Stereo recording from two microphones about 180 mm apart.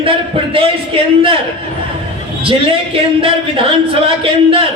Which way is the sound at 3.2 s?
30° right (ahead or behind).